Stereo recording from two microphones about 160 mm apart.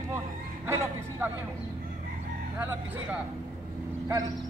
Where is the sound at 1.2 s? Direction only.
10° right (ahead or behind).